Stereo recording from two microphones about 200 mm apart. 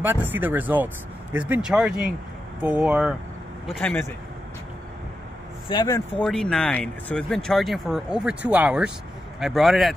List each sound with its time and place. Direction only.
0.0 s speech: 10° right (ahead or behind); by 4.1 s 10° left (ahead or behind)
5.7 s speech: 20° left (ahead or behind)
6.2 s speech: 5° left (ahead or behind)